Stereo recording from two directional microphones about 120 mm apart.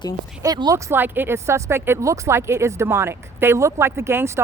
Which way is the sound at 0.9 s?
15° right (ahead or behind).